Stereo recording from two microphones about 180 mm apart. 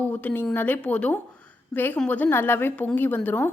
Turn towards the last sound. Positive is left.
turn(degrees=10)  # may be behind; listen again after turning